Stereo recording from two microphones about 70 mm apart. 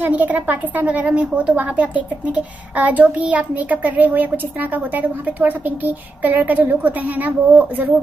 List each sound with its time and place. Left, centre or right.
0.0 s a woman's voice: right